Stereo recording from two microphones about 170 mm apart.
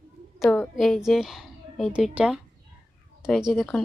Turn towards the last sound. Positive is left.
turn(degrees=0)  # may be behind; listen again after turning